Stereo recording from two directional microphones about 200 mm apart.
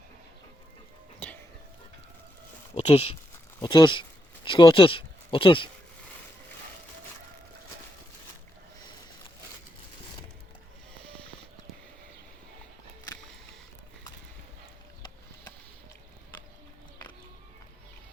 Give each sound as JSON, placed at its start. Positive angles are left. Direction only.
{"t": 2.7, "sound": "speech", "side_deg": 30}